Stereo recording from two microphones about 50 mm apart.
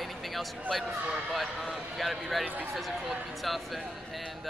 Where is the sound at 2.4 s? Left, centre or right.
Right.